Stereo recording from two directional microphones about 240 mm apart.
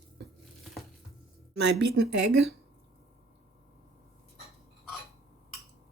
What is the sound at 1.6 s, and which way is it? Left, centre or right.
Speech, right.